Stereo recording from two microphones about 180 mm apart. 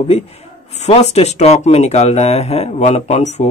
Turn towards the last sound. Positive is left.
turn(degrees=40)  # may be behind; listen again after turning